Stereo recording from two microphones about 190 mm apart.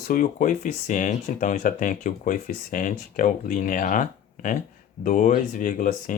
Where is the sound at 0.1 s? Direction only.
45° left (ahead or behind).